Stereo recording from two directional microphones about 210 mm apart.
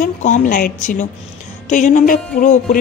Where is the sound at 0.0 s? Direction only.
35° left (ahead or behind).